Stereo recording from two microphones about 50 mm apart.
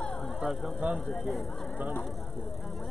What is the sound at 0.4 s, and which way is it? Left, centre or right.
Speech, centre.